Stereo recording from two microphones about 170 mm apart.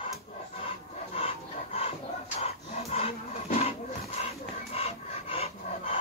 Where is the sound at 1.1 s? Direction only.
35° left (ahead or behind).